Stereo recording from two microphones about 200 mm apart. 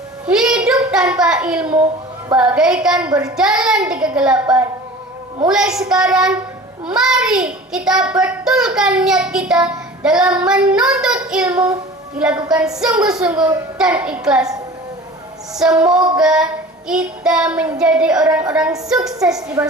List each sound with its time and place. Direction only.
0.3 s child singing: 5° right (ahead or behind)
3.1 s a child's voice: 15° right (ahead or behind)
3.3 s child singing: 5° right (ahead or behind)
15.5 s child singing: 5° right (ahead or behind)
19.6 s a child's voice: 15° right (ahead or behind)